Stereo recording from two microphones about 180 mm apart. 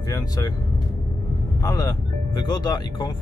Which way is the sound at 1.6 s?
20° left (ahead or behind).